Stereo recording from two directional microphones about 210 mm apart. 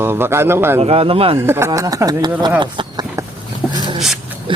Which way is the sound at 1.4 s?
10° right (ahead or behind).